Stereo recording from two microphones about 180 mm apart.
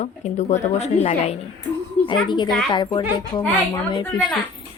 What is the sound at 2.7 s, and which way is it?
Speech, 25° left (ahead or behind).